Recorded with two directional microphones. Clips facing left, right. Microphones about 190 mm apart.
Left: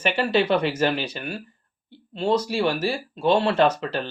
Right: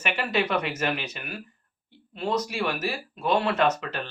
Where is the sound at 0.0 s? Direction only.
30° left (ahead or behind).